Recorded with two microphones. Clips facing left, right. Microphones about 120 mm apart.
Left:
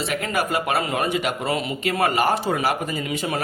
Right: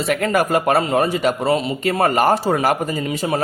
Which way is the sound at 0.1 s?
45° right (ahead or behind).